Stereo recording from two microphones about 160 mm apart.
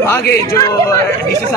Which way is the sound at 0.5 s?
20° left (ahead or behind).